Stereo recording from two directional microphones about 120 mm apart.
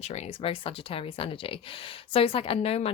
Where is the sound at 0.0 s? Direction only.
60° left (ahead or behind).